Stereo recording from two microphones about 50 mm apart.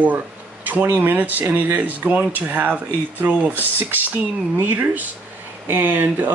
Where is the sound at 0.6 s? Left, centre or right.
Right.